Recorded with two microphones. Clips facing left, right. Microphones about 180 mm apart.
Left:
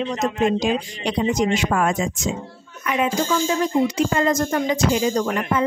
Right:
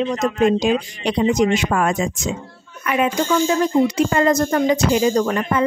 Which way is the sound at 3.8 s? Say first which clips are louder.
Right 3 dB; 65° right (ahead or behind).